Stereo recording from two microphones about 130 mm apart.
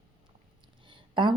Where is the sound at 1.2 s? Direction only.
40° right (ahead or behind).